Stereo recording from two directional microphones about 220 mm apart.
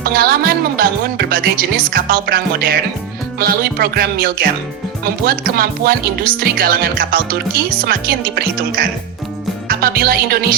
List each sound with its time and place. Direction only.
0.0 s speech: 40° right (ahead or behind)
3.3 s music: 45° right (ahead or behind)
5.0 s speech: 45° right (ahead or behind)